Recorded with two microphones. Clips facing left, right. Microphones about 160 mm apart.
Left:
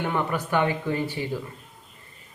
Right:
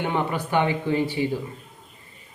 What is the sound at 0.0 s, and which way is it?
Speech, 20° right (ahead or behind).